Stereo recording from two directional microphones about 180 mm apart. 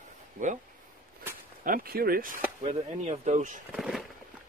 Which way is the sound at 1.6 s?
55° right (ahead or behind).